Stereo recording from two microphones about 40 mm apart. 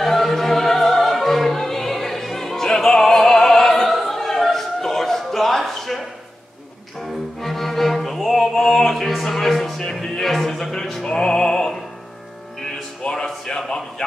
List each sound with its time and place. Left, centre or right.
0.0 s music: centre
5.6 s a sound: centre
7.0 s music: centre
9.8 s music: centre
11.1 s music: centre
13.1 s a sound: centre